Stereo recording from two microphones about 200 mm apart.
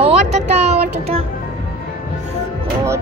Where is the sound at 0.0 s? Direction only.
35° right (ahead or behind).